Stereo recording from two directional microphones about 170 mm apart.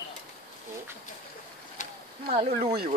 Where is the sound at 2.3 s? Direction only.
35° right (ahead or behind).